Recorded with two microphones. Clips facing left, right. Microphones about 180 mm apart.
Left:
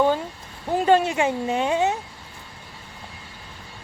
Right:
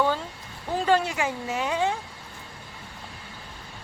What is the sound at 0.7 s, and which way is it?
Speech, 20° left (ahead or behind).